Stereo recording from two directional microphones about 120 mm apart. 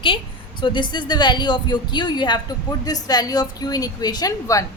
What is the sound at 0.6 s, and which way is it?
A woman's voice, 40° left (ahead or behind).